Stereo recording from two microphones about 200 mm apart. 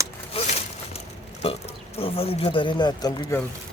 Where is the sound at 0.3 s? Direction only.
35° left (ahead or behind).